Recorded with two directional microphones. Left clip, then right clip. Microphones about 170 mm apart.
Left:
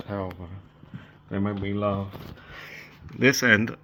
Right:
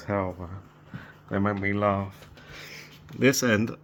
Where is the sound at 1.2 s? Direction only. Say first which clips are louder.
Right 3 dB; 15° right (ahead or behind).